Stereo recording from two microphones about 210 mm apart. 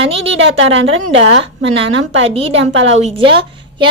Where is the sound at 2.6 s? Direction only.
60° right (ahead or behind).